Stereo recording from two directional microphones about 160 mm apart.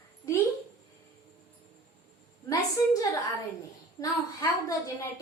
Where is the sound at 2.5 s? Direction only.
20° left (ahead or behind).